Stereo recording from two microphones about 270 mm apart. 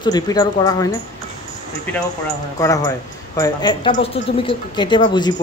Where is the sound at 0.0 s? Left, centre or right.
Centre.